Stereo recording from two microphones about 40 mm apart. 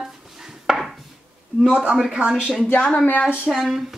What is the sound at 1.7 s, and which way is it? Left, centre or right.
Speech, right.